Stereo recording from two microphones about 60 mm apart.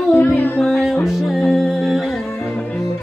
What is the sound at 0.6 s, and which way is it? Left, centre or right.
Music, centre.